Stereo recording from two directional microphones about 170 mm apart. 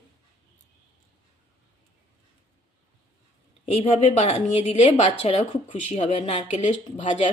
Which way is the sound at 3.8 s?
40° left (ahead or behind).